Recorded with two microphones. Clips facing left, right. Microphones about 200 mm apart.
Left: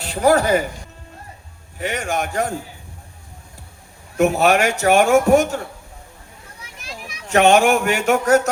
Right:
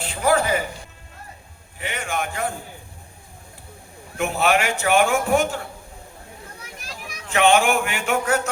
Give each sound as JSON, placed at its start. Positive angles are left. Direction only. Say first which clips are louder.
{"t": 0.0, "sound": "speech", "louder": "left 4 dB", "side_deg": 40}
{"t": 1.8, "sound": "a man's voice", "louder": "left 4 dB", "side_deg": 40}
{"t": 4.2, "sound": "a man's voice", "louder": "left 5 dB", "side_deg": 40}
{"t": 7.3, "sound": "a man's voice", "louder": "left 4 dB", "side_deg": 40}